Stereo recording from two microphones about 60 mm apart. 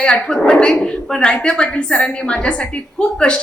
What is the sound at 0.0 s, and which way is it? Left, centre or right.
A woman's voice, centre.